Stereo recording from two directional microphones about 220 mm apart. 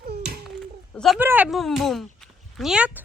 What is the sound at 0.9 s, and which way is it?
A woman's voice, centre (ahead or behind).